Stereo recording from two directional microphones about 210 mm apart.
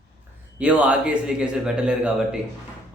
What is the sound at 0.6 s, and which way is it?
A man's voice, 5° right (ahead or behind).